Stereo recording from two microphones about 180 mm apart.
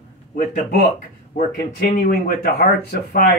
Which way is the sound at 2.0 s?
60° left (ahead or behind).